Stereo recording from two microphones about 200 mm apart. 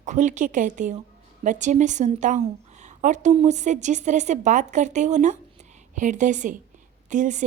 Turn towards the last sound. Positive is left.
turn(degrees=-40)  # may be behind; listen again after turning